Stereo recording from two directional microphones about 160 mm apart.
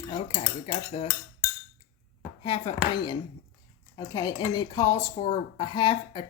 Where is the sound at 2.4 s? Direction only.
30° left (ahead or behind).